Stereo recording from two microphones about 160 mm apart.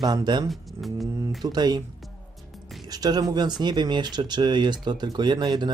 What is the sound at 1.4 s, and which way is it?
Speech, 25° right (ahead or behind).